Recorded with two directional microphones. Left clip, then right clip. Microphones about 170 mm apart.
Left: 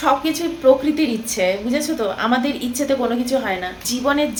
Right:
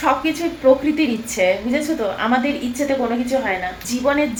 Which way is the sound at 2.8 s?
20° left (ahead or behind).